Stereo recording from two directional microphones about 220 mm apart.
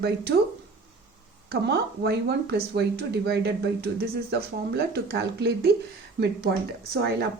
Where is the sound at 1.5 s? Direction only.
50° right (ahead or behind).